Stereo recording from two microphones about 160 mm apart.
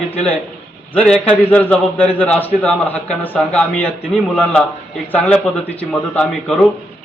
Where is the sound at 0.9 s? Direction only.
10° left (ahead or behind).